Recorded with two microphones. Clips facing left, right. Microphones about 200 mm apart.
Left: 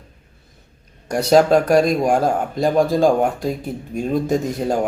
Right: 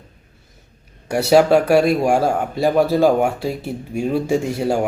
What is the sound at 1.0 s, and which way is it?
Speech, 5° right (ahead or behind).